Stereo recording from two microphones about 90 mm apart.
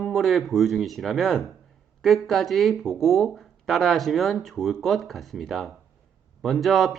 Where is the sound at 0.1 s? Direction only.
Centre (ahead or behind).